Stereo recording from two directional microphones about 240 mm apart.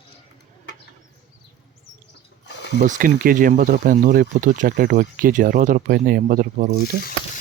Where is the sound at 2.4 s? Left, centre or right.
Left.